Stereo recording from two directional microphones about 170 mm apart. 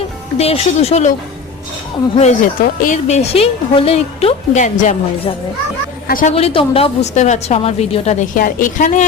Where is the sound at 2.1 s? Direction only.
45° left (ahead or behind).